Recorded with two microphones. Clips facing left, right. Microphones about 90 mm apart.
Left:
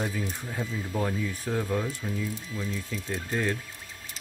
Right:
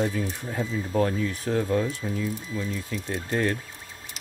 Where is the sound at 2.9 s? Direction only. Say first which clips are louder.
Right 3 dB; 60° right (ahead or behind).